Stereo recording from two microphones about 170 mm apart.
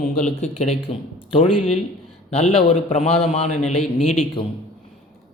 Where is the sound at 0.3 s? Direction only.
40° left (ahead or behind).